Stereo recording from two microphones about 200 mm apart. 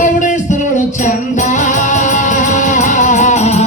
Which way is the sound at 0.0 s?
40° left (ahead or behind).